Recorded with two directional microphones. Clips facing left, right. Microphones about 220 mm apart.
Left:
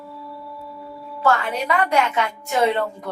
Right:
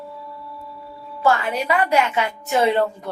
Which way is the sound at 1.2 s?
10° right (ahead or behind).